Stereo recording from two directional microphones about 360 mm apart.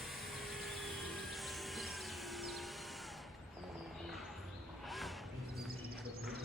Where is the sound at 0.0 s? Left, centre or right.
Centre.